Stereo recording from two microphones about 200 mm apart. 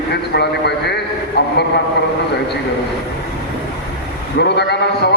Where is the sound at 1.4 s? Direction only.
55° left (ahead or behind).